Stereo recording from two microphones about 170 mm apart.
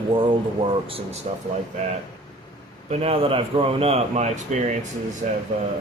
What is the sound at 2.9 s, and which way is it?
Speech, 35° right (ahead or behind).